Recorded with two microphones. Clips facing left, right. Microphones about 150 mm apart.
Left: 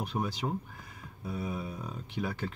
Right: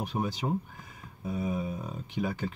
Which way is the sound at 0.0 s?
Centre (ahead or behind).